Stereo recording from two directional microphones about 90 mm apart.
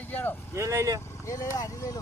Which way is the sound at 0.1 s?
20° left (ahead or behind).